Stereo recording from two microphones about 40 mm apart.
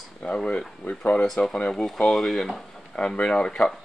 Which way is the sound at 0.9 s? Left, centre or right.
Left.